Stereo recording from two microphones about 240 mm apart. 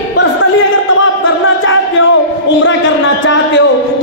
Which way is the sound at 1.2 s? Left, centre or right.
Left.